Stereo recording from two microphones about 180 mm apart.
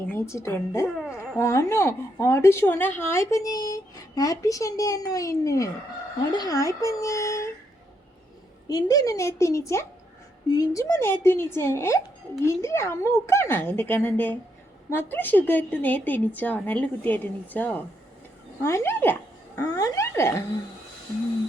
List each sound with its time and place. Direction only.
0.1 s a woman's voice: 15° left (ahead or behind)
8.6 s a woman's voice: 20° left (ahead or behind)
19.5 s a sound: 20° left (ahead or behind)